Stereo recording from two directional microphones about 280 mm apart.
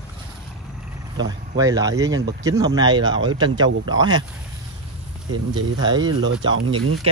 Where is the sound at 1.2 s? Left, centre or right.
Centre.